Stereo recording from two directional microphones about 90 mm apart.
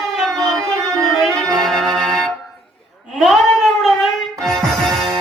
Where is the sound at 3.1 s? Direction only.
Centre (ahead or behind).